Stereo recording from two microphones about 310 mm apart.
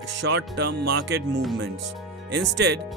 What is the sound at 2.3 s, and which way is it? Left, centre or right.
Speech, right.